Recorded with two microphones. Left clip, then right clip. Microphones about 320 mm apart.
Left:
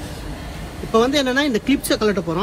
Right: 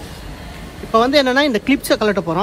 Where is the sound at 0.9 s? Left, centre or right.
Right.